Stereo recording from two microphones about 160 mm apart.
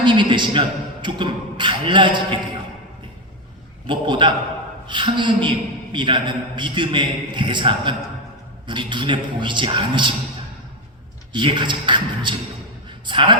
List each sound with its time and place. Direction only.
0.0 s a man's voice: 30° right (ahead or behind)
3.8 s a man's voice: 30° right (ahead or behind)
11.3 s a man's voice: 30° right (ahead or behind)